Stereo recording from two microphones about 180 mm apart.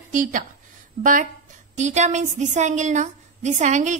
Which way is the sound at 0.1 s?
50° right (ahead or behind).